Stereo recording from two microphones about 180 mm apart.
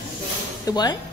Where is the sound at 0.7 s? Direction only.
20° left (ahead or behind).